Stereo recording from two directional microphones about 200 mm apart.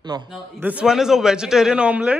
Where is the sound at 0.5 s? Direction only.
5° right (ahead or behind).